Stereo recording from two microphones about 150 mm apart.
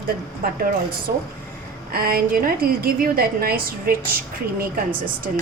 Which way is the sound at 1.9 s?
85° right.